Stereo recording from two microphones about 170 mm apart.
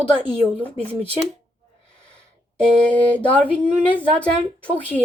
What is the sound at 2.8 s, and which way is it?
A woman's voice, 10° left (ahead or behind).